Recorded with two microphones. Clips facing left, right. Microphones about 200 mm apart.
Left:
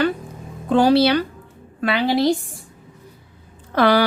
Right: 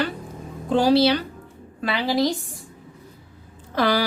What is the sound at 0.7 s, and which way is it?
A woman's voice, 60° left (ahead or behind).